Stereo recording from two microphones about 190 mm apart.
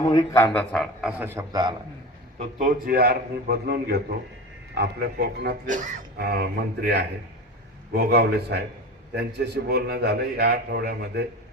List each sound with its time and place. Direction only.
0.0 s a man's voice: 20° left (ahead or behind); by 1.1 s 5° left (ahead or behind)
1.2 s a man's voice: 10° right (ahead or behind)
2.4 s a man's voice: 45° right (ahead or behind); by 5.5 s 60° right (ahead or behind)
5.6 s a man's voice: 45° right (ahead or behind)
6.2 s a man's voice: 60° right (ahead or behind)